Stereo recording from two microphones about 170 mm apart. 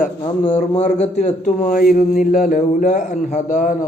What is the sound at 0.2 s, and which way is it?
Speech, 25° left (ahead or behind).